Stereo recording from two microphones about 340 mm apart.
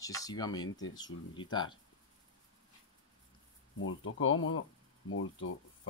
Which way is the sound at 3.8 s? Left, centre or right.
Left.